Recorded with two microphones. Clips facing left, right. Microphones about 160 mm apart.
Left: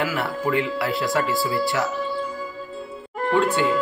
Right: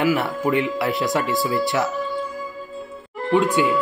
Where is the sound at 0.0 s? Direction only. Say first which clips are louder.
Right 4 dB; 20° right (ahead or behind).